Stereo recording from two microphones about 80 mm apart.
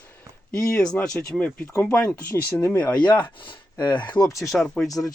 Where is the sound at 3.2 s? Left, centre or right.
Left.